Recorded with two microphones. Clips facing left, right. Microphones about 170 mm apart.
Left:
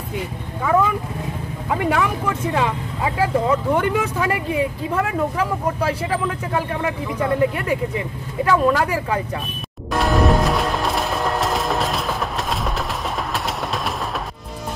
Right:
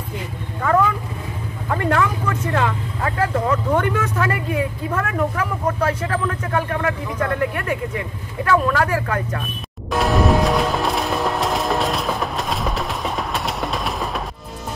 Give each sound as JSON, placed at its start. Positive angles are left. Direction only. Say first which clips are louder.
{"t": 1.7, "sound": "speech", "louder": "even", "side_deg": 10}
{"t": 9.9, "sound": "music", "louder": "even", "side_deg": 0}